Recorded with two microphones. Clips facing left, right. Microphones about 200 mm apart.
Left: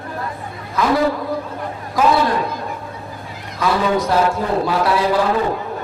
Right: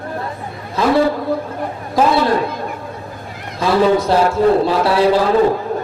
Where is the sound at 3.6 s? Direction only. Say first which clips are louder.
Right 4 dB; 30° right (ahead or behind).